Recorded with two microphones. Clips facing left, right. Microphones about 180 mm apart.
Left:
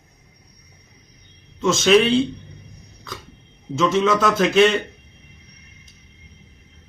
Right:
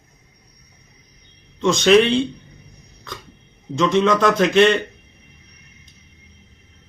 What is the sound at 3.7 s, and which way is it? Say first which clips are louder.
A man's voice: right 1 dB; 5° left (ahead or behind).